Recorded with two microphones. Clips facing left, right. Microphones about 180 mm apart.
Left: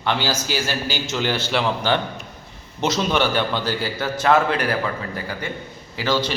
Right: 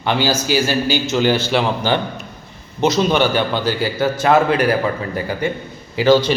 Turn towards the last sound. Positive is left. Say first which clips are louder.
# right 9 dB
turn(degrees=-15)  # may be behind; listen again after turning